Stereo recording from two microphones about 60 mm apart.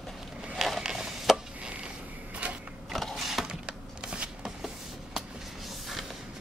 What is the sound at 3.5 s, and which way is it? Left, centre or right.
Shuffling cards, centre.